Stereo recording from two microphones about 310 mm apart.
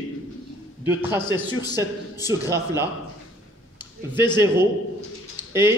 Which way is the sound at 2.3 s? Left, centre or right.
Centre.